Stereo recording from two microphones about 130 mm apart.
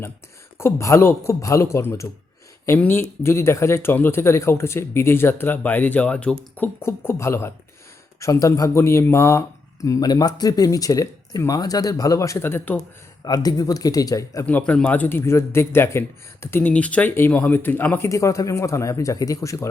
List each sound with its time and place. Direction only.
0.6 s a man's voice: 20° left (ahead or behind)
13.2 s a man's voice: 30° left (ahead or behind)
14.4 s a man's voice: 10° left (ahead or behind)